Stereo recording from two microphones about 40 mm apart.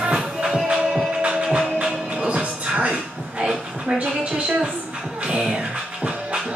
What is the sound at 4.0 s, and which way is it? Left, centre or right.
Speech, right.